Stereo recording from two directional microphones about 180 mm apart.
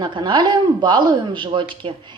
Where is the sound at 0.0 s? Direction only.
25° right (ahead or behind).